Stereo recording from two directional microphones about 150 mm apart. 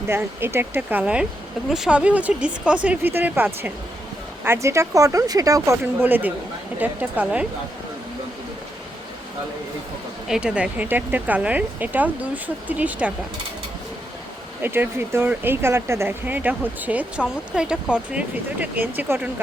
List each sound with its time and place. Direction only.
0.1 s speech: 15° right (ahead or behind)
10.2 s speech: 5° right (ahead or behind)
14.6 s speech: 15° right (ahead or behind)